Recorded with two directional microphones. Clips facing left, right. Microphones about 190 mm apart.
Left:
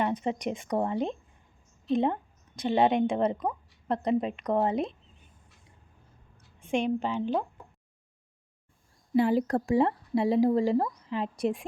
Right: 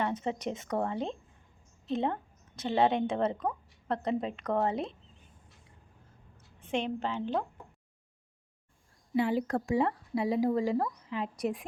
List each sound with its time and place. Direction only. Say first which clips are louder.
0.0 s a woman's voice: left 3 dB; 15° left (ahead or behind)
6.6 s a woman's voice: left 5 dB; 10° left (ahead or behind)
9.1 s speech: left 4 dB; 40° left (ahead or behind)